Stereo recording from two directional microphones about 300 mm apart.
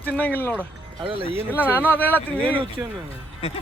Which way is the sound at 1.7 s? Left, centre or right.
Centre.